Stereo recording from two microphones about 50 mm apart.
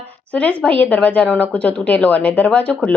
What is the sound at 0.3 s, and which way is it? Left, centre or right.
A woman's voice, left.